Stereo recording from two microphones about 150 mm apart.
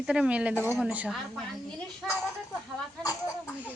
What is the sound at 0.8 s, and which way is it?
Speech, 5° right (ahead or behind).